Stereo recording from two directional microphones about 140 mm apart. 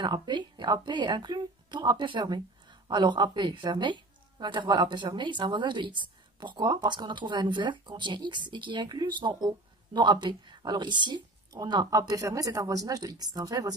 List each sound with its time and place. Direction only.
0.0 s a woman's voice: 30° right (ahead or behind)